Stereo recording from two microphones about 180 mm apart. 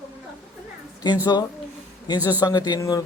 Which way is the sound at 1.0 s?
20° left (ahead or behind).